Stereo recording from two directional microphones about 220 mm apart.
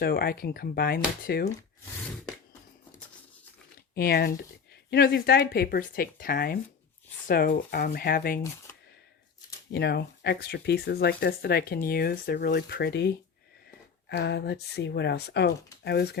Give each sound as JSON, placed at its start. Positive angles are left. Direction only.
{"t": 0.0, "sound": "speech", "side_deg": 45}
{"t": 3.9, "sound": "speech", "side_deg": 45}
{"t": 9.7, "sound": "speech", "side_deg": 50}
{"t": 14.1, "sound": "speech", "side_deg": 50}